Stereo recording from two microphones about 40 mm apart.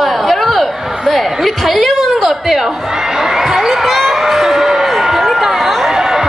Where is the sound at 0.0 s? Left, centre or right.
Centre.